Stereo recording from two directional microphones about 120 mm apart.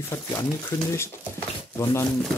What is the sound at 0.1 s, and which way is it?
Speech, 25° left (ahead or behind).